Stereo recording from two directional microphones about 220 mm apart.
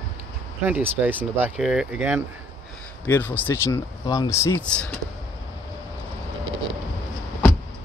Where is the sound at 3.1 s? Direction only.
10° left (ahead or behind).